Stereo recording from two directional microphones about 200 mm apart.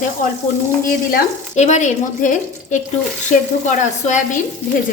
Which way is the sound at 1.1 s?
35° left (ahead or behind).